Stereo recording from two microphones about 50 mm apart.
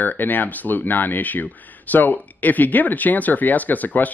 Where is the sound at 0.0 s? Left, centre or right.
Left.